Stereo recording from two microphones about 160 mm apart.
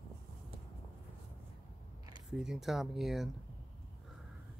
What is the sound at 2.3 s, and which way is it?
Speech, 5° right (ahead or behind).